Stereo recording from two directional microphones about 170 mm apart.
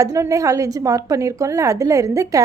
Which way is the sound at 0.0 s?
20° right (ahead or behind).